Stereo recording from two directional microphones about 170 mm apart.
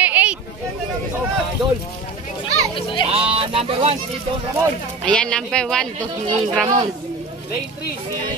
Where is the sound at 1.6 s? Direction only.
25° right (ahead or behind).